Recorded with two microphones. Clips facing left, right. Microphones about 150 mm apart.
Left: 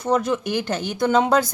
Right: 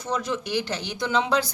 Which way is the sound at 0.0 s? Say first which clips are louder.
Left 7 dB; 55° left (ahead or behind).